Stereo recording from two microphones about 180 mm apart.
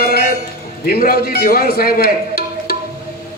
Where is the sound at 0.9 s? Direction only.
55° left (ahead or behind).